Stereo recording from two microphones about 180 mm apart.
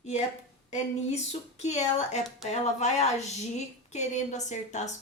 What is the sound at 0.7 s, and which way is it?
A woman's voice, 40° left (ahead or behind).